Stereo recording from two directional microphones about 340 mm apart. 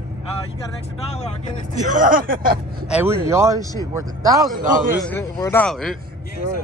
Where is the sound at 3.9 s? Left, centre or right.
Centre.